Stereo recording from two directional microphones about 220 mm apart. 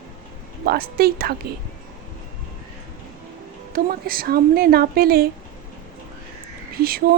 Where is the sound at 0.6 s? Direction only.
45° right (ahead or behind).